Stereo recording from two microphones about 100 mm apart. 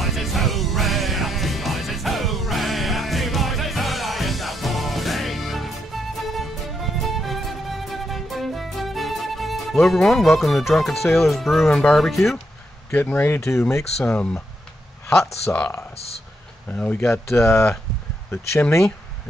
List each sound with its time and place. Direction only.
0.0 s music: centre (ahead or behind)
12.9 s speech: 20° left (ahead or behind)
14.0 s speech: 10° left (ahead or behind)
16.6 s speech: 15° left (ahead or behind)
17.1 s speech: 25° left (ahead or behind)